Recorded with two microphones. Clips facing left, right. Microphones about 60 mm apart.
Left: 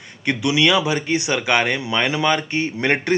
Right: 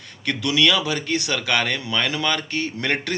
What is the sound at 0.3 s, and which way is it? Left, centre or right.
Speech, centre.